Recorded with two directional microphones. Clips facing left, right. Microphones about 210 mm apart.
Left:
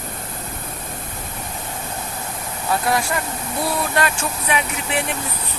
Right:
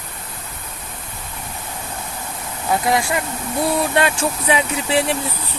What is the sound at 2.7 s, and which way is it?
Speech, 20° right (ahead or behind).